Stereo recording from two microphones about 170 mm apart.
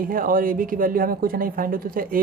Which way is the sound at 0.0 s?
55° right (ahead or behind).